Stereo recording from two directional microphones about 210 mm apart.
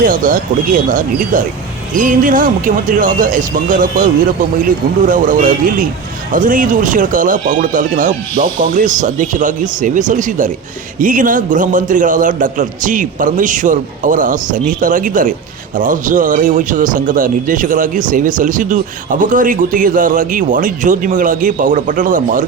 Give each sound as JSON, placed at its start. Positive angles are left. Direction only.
{"t": 0.0, "sound": "a man's voice", "side_deg": -40}